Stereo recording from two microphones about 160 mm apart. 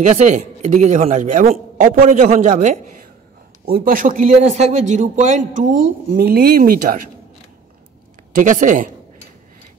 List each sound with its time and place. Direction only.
0.0 s speech: 50° right (ahead or behind)
3.6 s speech: 70° right (ahead or behind)
4.3 s speech: 40° right (ahead or behind); by 7.1 s 60° right (ahead or behind)
8.4 s speech: 55° right (ahead or behind)